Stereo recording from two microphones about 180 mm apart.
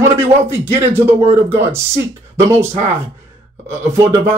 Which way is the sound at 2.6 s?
40° right (ahead or behind).